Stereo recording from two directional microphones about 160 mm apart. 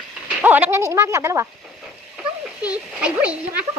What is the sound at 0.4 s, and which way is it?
Speech, 10° right (ahead or behind).